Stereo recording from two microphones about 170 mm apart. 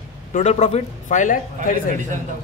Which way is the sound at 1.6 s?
45° right (ahead or behind).